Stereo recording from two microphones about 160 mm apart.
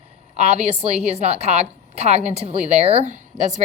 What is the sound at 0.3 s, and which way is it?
A woman's voice, 45° right (ahead or behind).